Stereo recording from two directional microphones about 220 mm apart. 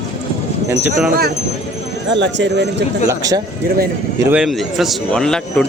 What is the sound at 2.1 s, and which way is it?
Speech, 55° right (ahead or behind).